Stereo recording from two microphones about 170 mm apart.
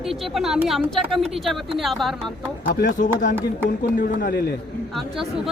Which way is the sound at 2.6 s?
70° left (ahead or behind).